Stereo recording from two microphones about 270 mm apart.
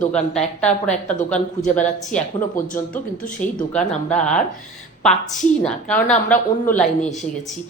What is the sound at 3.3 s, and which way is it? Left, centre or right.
A woman's voice, centre.